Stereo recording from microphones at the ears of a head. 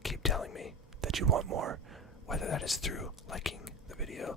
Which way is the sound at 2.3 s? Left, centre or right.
Left.